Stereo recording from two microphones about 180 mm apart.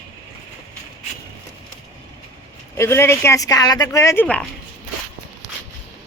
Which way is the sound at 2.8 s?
15° left (ahead or behind).